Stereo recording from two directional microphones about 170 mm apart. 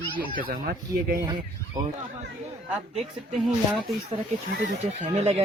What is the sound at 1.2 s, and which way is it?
Speech, 25° right (ahead or behind).